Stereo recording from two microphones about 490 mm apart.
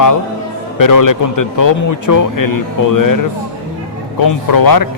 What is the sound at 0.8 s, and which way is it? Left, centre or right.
A man's voice, left.